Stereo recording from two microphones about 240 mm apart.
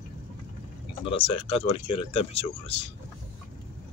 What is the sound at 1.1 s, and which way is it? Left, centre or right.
Speech, left.